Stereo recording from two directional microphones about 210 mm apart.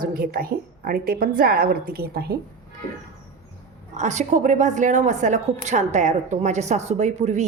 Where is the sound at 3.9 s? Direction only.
35° right (ahead or behind).